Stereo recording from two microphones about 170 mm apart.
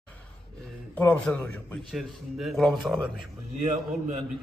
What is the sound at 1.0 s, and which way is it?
A man's voice, 10° left (ahead or behind).